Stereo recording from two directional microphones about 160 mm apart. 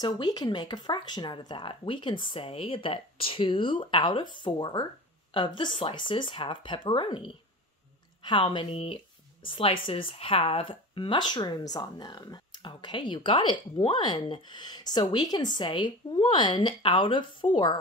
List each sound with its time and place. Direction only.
0.0 s speech: 25° left (ahead or behind)